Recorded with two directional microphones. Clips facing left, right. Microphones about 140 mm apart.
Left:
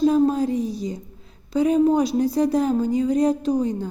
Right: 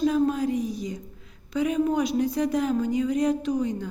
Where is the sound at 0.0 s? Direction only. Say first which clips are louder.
Left 5 dB; 35° left (ahead or behind).